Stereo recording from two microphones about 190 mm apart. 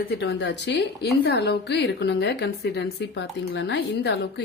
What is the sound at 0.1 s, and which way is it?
A woman's voice, 60° left (ahead or behind).